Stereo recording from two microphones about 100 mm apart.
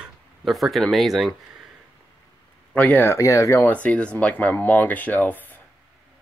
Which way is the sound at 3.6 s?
15° left (ahead or behind).